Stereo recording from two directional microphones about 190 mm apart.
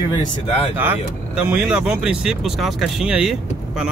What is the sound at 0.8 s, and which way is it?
Speech, 10° right (ahead or behind).